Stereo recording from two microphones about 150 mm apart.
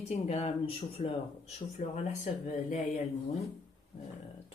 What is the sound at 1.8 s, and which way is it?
Speech, 55° left (ahead or behind).